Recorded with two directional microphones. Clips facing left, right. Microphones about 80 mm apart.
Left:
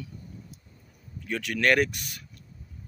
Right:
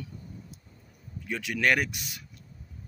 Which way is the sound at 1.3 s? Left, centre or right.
Centre.